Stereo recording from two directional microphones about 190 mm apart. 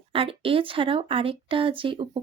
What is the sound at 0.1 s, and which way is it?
Speech, 30° right (ahead or behind).